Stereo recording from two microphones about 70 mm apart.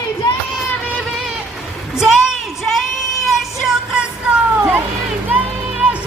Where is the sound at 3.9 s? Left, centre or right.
Centre.